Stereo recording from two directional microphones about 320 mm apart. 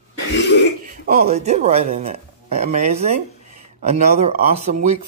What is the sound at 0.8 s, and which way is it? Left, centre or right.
Speech, right.